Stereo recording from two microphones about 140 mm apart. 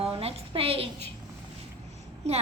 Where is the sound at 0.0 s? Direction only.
45° right (ahead or behind).